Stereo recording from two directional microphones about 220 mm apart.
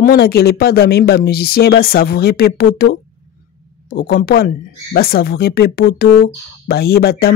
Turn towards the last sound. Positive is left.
turn(degrees=45)  # may be behind; listen again after turning